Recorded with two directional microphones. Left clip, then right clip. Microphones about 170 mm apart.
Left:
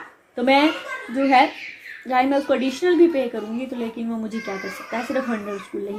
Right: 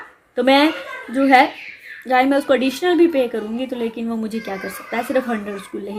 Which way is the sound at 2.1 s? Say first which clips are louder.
Right 4 dB; 50° right (ahead or behind).